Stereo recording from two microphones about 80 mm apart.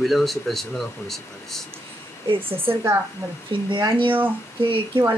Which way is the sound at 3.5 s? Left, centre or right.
Right.